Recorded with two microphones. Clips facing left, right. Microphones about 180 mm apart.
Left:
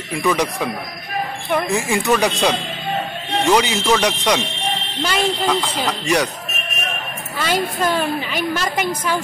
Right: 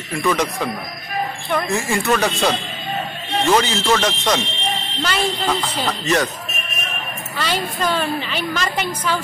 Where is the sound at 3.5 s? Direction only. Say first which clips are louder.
Left 1 dB; 15° left (ahead or behind).